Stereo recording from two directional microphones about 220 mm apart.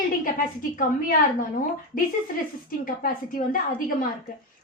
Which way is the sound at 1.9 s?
20° left (ahead or behind).